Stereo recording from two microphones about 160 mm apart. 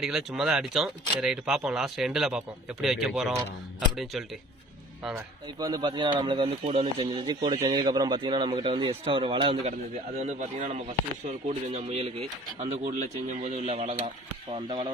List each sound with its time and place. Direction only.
0.0 s speech: centre (ahead or behind)
5.5 s a man's voice: 25° right (ahead or behind)
10.2 s a man's voice: 50° right (ahead or behind)